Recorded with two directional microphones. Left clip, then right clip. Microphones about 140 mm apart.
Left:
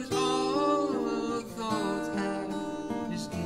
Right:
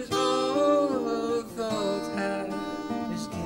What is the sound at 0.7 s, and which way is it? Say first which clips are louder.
Music: right 4 dB; 30° left (ahead or behind).